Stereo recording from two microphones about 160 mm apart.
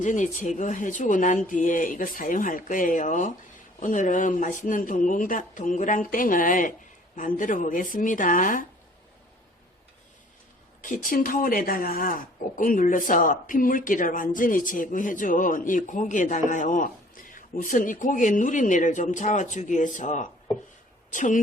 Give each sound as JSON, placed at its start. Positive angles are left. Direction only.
{"t": 0.0, "sound": "speech", "side_deg": 50}
{"t": 10.8, "sound": "speech", "side_deg": 55}